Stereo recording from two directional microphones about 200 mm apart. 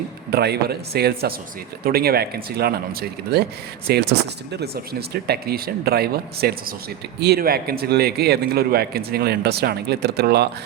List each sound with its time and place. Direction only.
0.3 s a man's voice: 55° right (ahead or behind)